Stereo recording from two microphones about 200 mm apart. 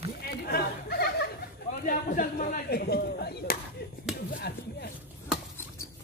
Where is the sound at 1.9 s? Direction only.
45° left (ahead or behind).